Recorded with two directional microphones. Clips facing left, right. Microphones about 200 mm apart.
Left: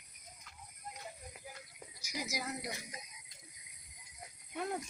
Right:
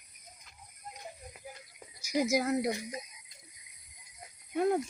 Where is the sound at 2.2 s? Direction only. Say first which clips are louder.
Right 13 dB; 55° right (ahead or behind).